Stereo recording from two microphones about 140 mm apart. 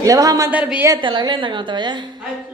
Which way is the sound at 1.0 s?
35° right (ahead or behind).